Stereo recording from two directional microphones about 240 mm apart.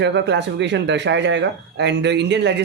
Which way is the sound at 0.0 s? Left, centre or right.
Right.